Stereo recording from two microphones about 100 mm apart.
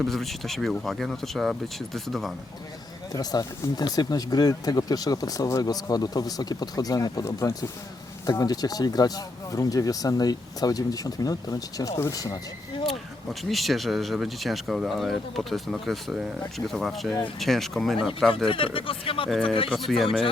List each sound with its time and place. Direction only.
0.0 s speech: centre (ahead or behind)
3.1 s speech: 40° left (ahead or behind)
13.4 s speech: centre (ahead or behind)
18.4 s speech: 60° left (ahead or behind)
19.7 s speech: centre (ahead or behind)